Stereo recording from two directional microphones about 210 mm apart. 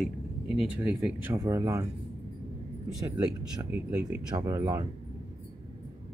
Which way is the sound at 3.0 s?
15° right (ahead or behind).